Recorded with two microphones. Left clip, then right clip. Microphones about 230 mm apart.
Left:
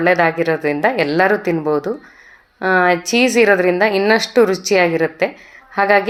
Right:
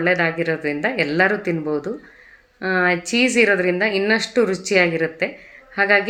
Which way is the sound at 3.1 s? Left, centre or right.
Centre.